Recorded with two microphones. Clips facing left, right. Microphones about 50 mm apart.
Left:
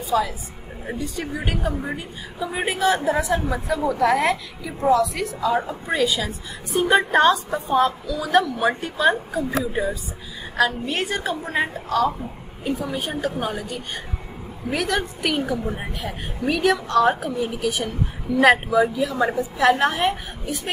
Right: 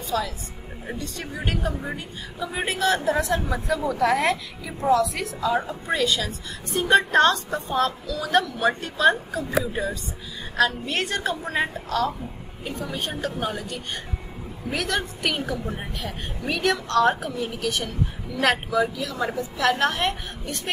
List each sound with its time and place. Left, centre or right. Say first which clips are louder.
0.1 s a woman's voice: left 5 dB; centre